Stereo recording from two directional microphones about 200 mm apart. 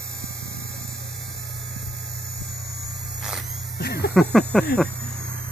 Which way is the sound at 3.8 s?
50° left (ahead or behind).